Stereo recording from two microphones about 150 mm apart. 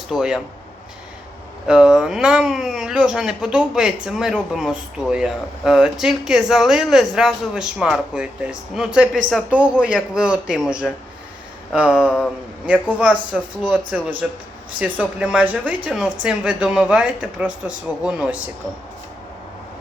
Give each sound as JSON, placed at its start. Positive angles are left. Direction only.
{"t": 0.1, "sound": "speech", "side_deg": -5}
{"t": 1.6, "sound": "speech", "side_deg": -5}